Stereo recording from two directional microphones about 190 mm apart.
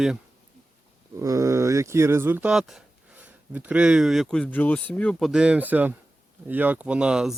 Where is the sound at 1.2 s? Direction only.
15° right (ahead or behind).